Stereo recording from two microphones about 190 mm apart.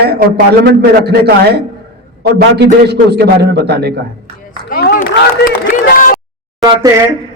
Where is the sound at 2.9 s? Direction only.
60° right (ahead or behind).